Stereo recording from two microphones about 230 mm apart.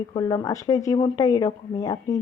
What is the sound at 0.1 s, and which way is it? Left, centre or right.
Speech, centre.